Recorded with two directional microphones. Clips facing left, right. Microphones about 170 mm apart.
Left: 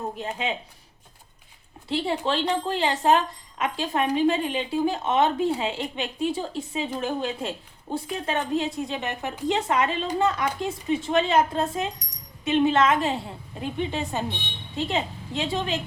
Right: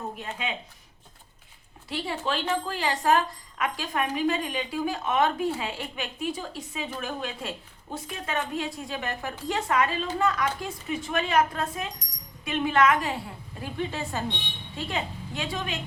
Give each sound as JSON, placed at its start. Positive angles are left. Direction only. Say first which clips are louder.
{"t": 0.2, "sound": "a woman's voice", "louder": "left 4 dB", "side_deg": 30}
{"t": 1.9, "sound": "a woman's voice", "louder": "left 5 dB", "side_deg": 25}